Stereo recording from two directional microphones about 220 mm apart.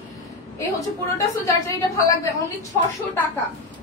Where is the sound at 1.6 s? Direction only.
15° left (ahead or behind).